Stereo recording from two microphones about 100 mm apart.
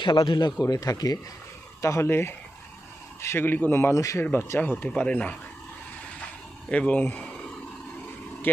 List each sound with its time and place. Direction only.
0.0 s a man's voice: 55° left (ahead or behind)
0.6 s speech: 35° left (ahead or behind)
4.2 s speech: 20° left (ahead or behind)
6.7 s speech: 15° left (ahead or behind)